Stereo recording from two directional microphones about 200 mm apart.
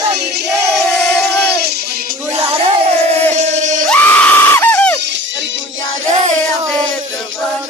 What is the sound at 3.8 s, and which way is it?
Screaming, 10° left (ahead or behind).